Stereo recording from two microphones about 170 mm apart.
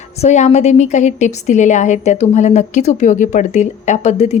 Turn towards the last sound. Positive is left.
turn(degrees=40)  # may be behind; listen again after turning